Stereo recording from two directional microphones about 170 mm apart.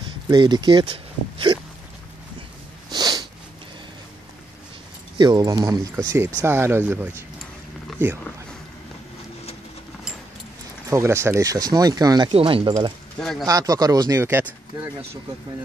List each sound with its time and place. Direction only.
0.3 s speech: 25° right (ahead or behind)
2.9 s snort: 25° right (ahead or behind)
5.1 s speech: 25° right (ahead or behind)
10.9 s speech: 15° right (ahead or behind)
13.2 s speech: 5° left (ahead or behind)
13.5 s speech: 20° right (ahead or behind)